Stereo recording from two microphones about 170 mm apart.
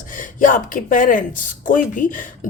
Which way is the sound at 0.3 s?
50° left (ahead or behind).